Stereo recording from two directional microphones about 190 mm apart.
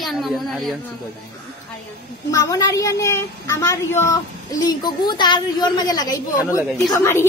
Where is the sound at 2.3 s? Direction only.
20° left (ahead or behind).